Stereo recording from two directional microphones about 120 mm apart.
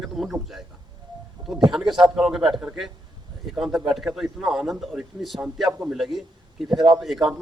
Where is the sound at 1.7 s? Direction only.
5° right (ahead or behind).